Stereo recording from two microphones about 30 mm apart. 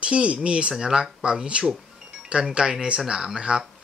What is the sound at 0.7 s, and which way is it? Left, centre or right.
Speech, right.